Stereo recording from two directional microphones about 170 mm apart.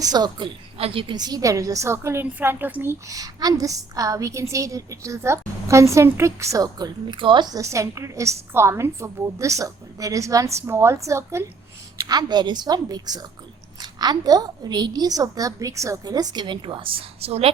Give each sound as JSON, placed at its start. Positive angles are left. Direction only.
{"t": 0.0, "sound": "a woman's voice", "side_deg": -25}